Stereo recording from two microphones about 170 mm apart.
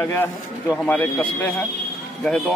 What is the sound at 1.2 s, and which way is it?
Speech, 10° left (ahead or behind).